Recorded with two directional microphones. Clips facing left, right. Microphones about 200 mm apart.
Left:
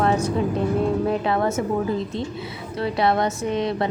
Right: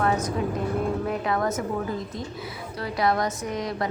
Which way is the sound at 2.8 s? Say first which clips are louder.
Left 4 dB; 25° left (ahead or behind).